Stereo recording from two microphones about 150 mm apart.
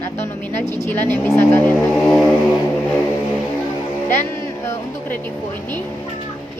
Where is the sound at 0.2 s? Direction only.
15° left (ahead or behind).